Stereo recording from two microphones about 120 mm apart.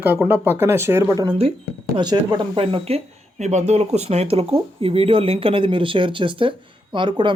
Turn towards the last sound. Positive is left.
turn(degrees=-40)  # may be behind; listen again after turning